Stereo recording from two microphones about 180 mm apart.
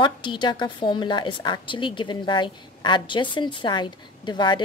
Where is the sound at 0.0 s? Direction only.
25° left (ahead or behind).